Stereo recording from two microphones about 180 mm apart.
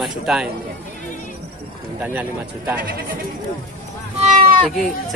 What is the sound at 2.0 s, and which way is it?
Speech, 10° right (ahead or behind).